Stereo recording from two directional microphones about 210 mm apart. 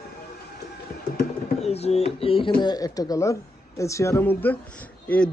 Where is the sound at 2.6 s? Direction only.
20° left (ahead or behind).